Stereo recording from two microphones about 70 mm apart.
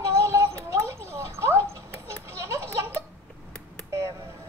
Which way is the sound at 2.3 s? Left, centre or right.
Right.